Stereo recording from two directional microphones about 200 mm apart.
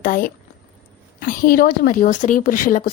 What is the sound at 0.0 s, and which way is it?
A woman's voice, 45° left (ahead or behind).